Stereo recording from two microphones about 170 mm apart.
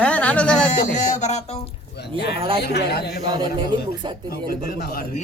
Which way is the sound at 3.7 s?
25° right (ahead or behind).